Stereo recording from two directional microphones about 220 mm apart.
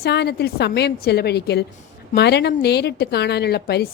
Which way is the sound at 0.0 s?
45° left (ahead or behind).